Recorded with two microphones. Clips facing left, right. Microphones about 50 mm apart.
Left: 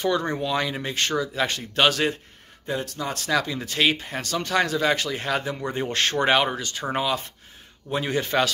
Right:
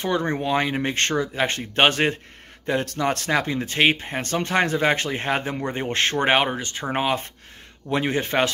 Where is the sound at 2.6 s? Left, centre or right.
Right.